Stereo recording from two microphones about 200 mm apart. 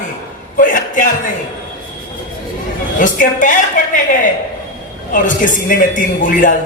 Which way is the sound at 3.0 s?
40° left (ahead or behind).